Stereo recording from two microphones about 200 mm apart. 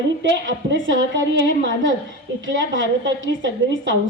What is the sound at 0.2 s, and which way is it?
A woman's voice, 60° right (ahead or behind).